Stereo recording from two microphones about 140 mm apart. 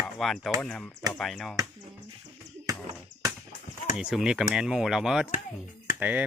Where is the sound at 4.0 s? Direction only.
5° right (ahead or behind).